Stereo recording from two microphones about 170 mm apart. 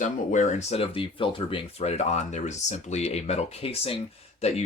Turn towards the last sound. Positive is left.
turn(degrees=40)  # may be behind; listen again after turning